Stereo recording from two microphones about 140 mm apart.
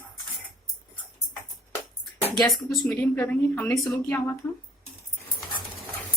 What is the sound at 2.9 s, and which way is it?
A woman's voice, 15° left (ahead or behind).